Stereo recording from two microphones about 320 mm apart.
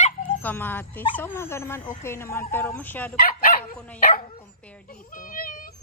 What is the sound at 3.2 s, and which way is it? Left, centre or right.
Dog, left.